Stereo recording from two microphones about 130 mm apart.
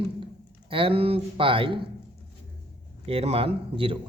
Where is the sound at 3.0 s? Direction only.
50° right (ahead or behind).